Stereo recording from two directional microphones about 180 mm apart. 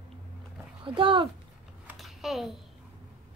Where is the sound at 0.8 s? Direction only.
30° right (ahead or behind).